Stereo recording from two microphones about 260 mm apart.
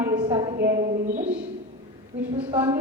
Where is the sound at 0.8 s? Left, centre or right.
Right.